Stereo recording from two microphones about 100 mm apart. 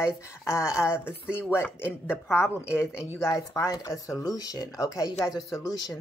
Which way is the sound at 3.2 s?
30° left (ahead or behind).